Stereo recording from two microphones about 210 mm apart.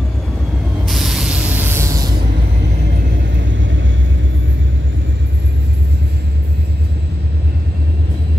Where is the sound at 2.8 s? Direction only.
50° right (ahead or behind).